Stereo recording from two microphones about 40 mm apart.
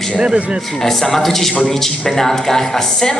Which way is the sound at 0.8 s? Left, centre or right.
Centre.